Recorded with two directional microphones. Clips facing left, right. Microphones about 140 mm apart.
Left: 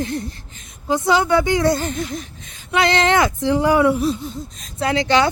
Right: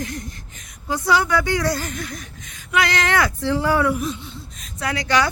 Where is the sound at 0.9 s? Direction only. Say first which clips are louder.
Left 3 dB; 20° left (ahead or behind); by 4.4 s 40° left (ahead or behind).